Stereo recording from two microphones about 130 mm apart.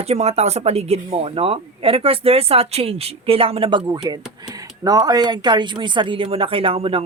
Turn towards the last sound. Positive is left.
turn(degrees=-45)  # may be behind; listen again after turning